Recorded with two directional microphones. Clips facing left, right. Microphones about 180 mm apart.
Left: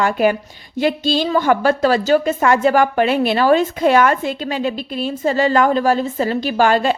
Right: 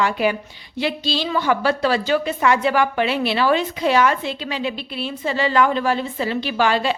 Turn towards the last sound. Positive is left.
turn(degrees=45)  # may be behind; listen again after turning